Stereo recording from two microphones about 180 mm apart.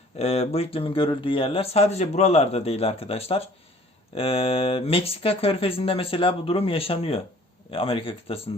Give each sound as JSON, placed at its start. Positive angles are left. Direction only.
{"t": 0.2, "sound": "speech", "side_deg": 35}